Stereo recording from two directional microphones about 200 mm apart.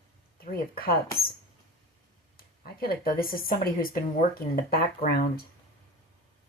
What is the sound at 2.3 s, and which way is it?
Speech, 45° left (ahead or behind).